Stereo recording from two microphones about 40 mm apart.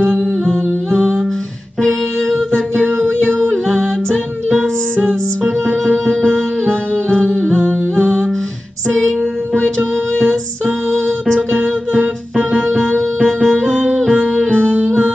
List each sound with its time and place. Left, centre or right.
1.8 s music: centre
5.9 s music: centre
6.7 s music: left
8.8 s music: centre
10.1 s music: centre
12.5 s music: centre
14.5 s music: left